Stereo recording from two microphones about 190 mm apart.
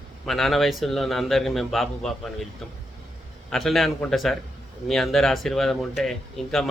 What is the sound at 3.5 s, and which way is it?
Speech, centre (ahead or behind).